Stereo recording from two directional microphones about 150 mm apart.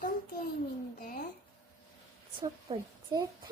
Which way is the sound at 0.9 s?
70° left (ahead or behind).